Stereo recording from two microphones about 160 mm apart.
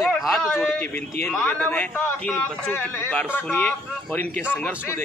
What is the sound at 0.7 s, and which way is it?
A man's voice, 10° left (ahead or behind).